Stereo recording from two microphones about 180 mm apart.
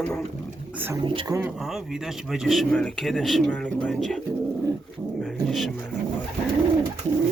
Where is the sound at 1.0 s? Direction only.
25° right (ahead or behind).